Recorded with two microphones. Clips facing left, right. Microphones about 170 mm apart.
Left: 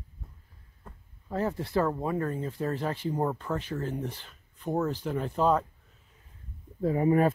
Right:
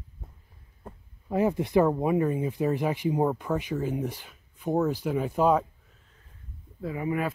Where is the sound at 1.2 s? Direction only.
15° right (ahead or behind).